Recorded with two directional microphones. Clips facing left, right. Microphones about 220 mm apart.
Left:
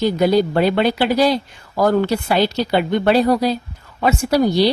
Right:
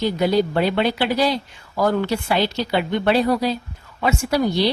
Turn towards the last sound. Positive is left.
turn(degrees=40)  # may be behind; listen again after turning